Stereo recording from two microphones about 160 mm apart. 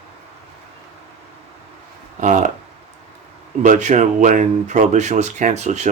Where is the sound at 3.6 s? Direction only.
50° right (ahead or behind).